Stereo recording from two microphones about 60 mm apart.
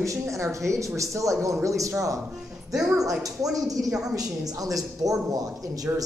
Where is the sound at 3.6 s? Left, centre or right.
Right.